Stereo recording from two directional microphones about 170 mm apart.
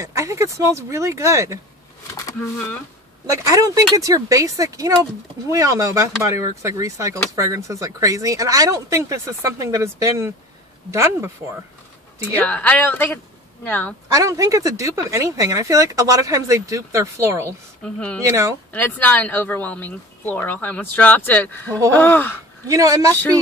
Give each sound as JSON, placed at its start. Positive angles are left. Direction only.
{"t": 0.0, "sound": "speech", "side_deg": -20}
{"t": 2.1, "sound": "speech", "side_deg": 15}
{"t": 3.4, "sound": "speech", "side_deg": -20}
{"t": 12.4, "sound": "speech", "side_deg": 10}
{"t": 14.1, "sound": "speech", "side_deg": -20}
{"t": 17.8, "sound": "speech", "side_deg": 5}
{"t": 22.7, "sound": "speech", "side_deg": -20}